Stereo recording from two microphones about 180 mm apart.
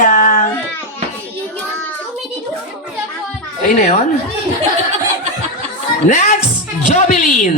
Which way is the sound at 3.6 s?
40° left (ahead or behind).